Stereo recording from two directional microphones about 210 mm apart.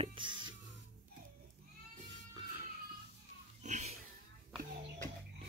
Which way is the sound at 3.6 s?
35° right (ahead or behind).